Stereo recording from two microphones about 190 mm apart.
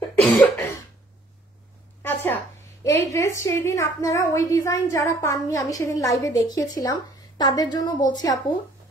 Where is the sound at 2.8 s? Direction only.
15° left (ahead or behind).